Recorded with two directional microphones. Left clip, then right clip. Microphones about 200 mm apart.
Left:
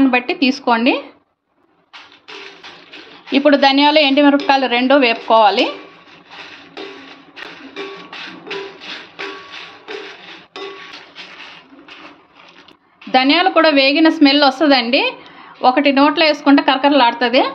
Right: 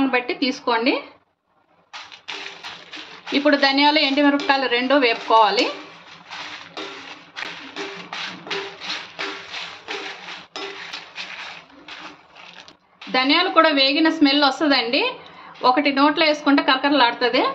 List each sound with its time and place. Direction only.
0.1 s a woman's voice: 40° left (ahead or behind)
3.3 s a woman's voice: 35° left (ahead or behind)
8.1 s music: 10° right (ahead or behind)
13.1 s a woman's voice: 45° left (ahead or behind)